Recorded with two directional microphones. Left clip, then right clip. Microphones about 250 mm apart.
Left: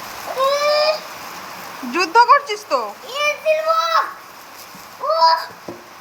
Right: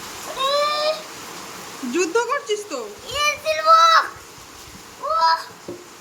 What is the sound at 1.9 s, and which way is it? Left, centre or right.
Speech, centre.